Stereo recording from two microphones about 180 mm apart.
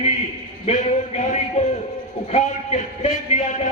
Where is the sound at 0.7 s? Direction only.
40° left (ahead or behind).